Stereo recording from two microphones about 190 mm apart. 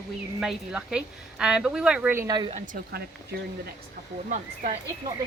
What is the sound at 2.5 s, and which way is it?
Speech, 45° right (ahead or behind).